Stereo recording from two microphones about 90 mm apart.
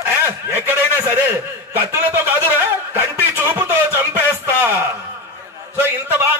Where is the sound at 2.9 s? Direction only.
25° right (ahead or behind).